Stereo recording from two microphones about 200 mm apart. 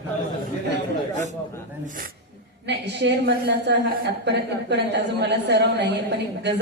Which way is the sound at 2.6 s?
60° right (ahead or behind).